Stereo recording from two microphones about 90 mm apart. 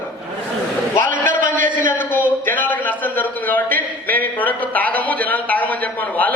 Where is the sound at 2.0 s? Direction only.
20° left (ahead or behind).